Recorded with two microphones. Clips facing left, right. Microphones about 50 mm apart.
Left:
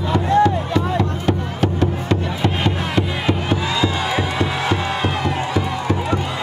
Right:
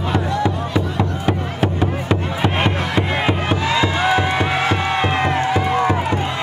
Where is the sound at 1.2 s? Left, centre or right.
Centre.